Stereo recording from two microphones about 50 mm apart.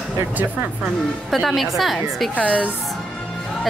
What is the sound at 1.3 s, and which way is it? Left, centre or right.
A woman's voice, centre.